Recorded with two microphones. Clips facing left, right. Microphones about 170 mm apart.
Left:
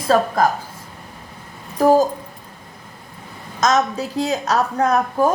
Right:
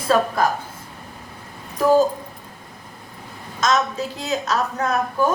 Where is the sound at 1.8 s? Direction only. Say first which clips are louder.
Left 2 dB; 40° left (ahead or behind).